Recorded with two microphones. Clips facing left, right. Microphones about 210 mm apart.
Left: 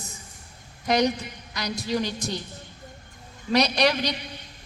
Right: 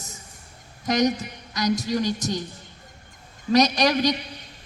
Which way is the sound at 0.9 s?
45° right (ahead or behind).